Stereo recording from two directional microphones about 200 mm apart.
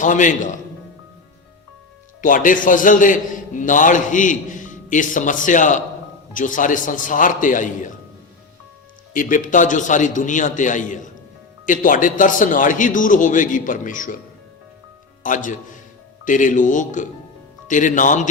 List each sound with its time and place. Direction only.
0.0 s a man's voice: 40° left (ahead or behind)
2.2 s a man's voice: 40° left (ahead or behind)
9.1 s a man's voice: 40° left (ahead or behind)
15.2 s a man's voice: 40° left (ahead or behind)